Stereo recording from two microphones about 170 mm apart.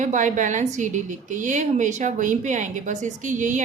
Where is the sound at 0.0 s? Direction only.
45° right (ahead or behind).